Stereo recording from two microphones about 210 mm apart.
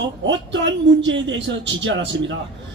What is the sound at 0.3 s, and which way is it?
A man's voice, 60° right (ahead or behind).